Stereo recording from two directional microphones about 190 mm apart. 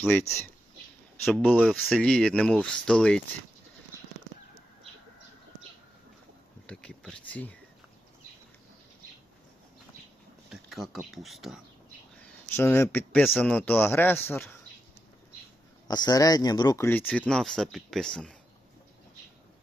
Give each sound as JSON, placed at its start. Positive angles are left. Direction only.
{"t": 0.0, "sound": "speech", "side_deg": 10}
{"t": 6.7, "sound": "speech", "side_deg": 5}
{"t": 10.5, "sound": "speech", "side_deg": 0}
{"t": 12.5, "sound": "speech", "side_deg": 10}
{"t": 15.9, "sound": "speech", "side_deg": 20}